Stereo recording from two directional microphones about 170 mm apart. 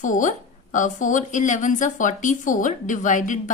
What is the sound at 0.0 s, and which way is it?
A woman's voice, 50° left (ahead or behind).